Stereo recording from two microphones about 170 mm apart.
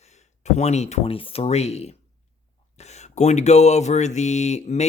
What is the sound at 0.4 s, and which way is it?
Speech, 40° left (ahead or behind).